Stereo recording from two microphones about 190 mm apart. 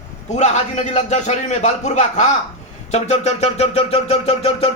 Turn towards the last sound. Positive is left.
turn(degrees=30)  # may be behind; listen again after turning